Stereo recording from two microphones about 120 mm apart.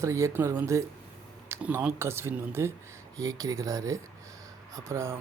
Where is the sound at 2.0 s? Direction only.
20° right (ahead or behind).